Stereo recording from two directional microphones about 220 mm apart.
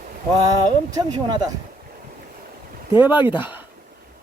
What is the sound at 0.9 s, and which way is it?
Speech, 20° right (ahead or behind).